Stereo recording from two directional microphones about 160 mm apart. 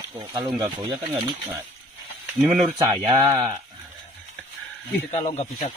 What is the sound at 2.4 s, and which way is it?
Speech, centre (ahead or behind).